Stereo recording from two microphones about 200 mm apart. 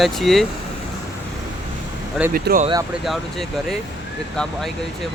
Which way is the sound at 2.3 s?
45° right (ahead or behind).